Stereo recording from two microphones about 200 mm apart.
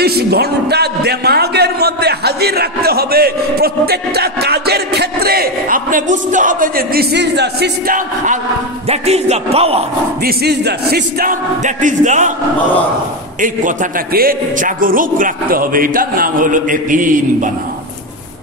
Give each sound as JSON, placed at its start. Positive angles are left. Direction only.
{"t": 0.0, "sound": "a man's voice", "side_deg": -50}
{"t": 8.8, "sound": "a man's voice", "side_deg": -30}
{"t": 10.2, "sound": "a man's voice", "side_deg": -55}
{"t": 13.4, "sound": "a man's voice", "side_deg": -45}